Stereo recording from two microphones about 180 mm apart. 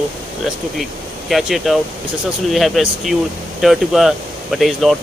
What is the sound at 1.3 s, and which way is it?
Speech, centre (ahead or behind).